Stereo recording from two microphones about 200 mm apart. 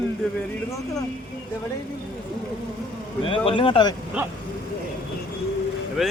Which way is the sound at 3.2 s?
25° left (ahead or behind).